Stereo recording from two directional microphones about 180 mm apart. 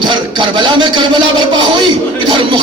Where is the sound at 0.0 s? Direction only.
25° right (ahead or behind).